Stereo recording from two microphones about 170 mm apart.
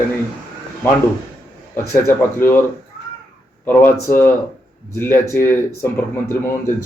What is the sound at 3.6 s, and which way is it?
A man's voice, 10° left (ahead or behind).